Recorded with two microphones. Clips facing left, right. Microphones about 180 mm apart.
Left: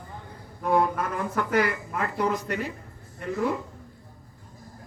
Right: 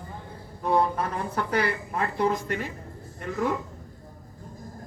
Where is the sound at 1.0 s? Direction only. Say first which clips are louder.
Left 1 dB; 35° right (ahead or behind).